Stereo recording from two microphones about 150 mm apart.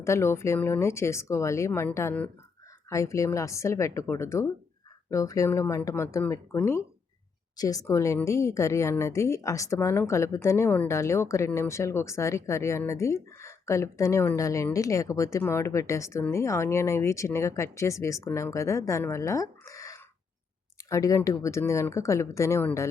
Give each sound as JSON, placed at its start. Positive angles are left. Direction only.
{"t": 0.0, "sound": "a woman's voice", "side_deg": 20}